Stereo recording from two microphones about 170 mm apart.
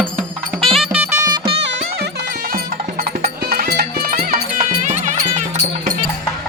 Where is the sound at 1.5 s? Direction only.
85° right.